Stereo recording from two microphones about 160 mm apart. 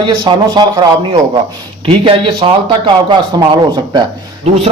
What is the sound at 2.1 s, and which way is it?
Speech, 35° right (ahead or behind).